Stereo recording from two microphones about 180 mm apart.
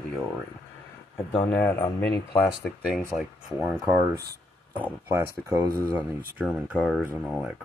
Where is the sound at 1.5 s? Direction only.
10° left (ahead or behind).